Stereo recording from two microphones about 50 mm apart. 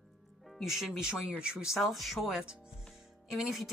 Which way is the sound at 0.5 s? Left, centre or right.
Centre.